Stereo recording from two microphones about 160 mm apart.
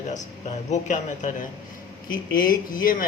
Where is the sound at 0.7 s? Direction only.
50° left (ahead or behind).